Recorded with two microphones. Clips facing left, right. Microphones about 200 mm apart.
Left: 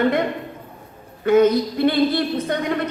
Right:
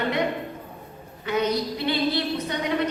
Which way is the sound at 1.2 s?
50° left (ahead or behind).